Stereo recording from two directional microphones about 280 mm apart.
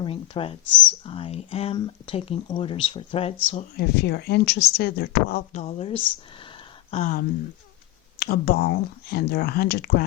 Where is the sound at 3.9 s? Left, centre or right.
Left.